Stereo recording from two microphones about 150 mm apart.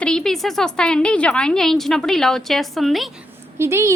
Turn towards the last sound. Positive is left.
turn(degrees=-20)  # may be behind; listen again after turning